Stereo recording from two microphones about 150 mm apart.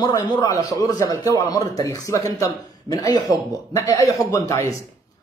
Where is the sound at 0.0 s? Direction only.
25° left (ahead or behind).